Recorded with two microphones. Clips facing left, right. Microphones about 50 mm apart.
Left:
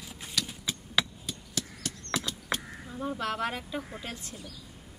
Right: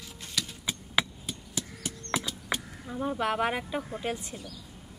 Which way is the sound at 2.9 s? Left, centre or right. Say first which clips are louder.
Right 4 dB; centre.